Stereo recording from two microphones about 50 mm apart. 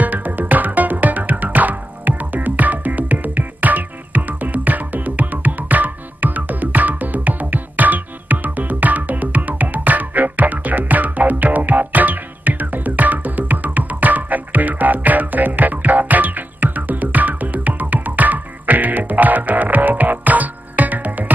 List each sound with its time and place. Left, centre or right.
0.0 s music: right